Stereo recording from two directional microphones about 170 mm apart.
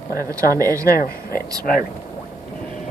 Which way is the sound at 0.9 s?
60° left (ahead or behind).